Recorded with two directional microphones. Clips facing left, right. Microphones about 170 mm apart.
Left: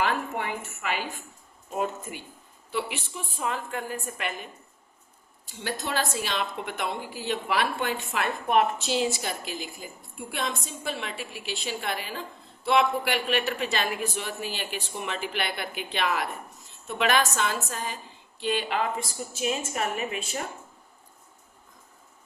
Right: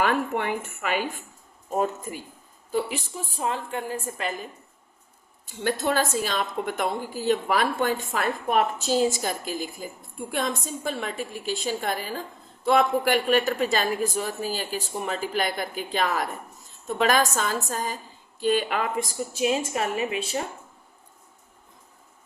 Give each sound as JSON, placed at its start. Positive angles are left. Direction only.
{"t": 0.0, "sound": "a woman's voice", "side_deg": -55}
{"t": 1.7, "sound": "a man's voice", "side_deg": -40}
{"t": 5.5, "sound": "a woman's voice", "side_deg": -50}
{"t": 19.3, "sound": "a man's voice", "side_deg": -35}